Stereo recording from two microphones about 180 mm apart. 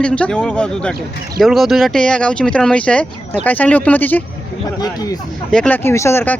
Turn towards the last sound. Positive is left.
turn(degrees=15)  # may be behind; listen again after turning